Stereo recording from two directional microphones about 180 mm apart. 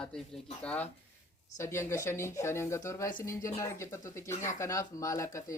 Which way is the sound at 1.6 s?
15° left (ahead or behind).